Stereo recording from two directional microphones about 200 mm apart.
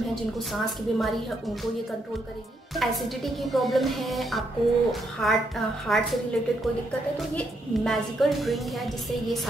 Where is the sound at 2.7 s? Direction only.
Centre (ahead or behind).